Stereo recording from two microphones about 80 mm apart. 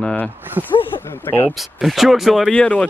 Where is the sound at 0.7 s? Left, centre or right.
Left.